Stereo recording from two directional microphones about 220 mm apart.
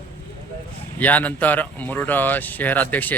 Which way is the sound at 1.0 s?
5° left (ahead or behind).